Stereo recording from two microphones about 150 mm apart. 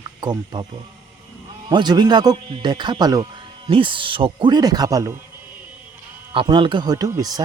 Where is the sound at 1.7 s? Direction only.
30° right (ahead or behind).